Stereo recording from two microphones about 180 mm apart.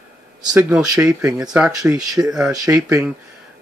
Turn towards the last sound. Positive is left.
turn(degrees=-15)  # may be behind; listen again after turning